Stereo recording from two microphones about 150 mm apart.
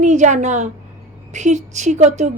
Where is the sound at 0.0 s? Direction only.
55° right (ahead or behind).